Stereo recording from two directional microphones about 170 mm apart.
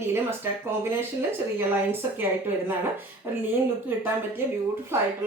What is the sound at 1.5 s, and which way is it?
Speech, 10° right (ahead or behind).